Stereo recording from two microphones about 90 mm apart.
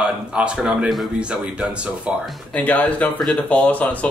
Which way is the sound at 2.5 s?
15° left (ahead or behind).